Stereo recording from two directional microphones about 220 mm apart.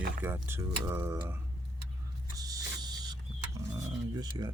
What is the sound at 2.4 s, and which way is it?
Mechanisms, 20° right (ahead or behind).